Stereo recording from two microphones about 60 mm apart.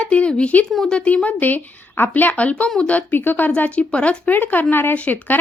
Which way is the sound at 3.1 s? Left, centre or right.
Left.